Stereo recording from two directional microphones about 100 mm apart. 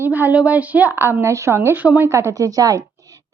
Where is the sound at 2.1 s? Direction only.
30° right (ahead or behind).